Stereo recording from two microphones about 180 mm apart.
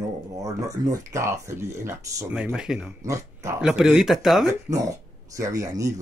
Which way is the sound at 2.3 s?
5° right (ahead or behind).